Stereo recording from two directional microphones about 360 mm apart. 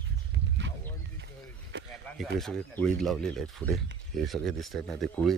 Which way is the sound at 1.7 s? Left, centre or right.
Right.